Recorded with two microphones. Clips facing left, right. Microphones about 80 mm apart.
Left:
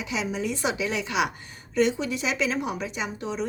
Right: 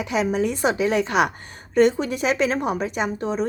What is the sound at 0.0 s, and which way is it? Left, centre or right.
A woman's voice, right.